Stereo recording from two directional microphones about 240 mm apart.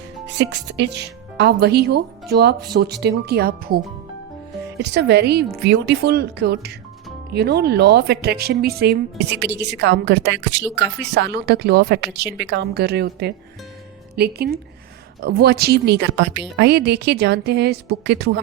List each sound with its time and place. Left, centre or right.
0.5 s a woman's voice: right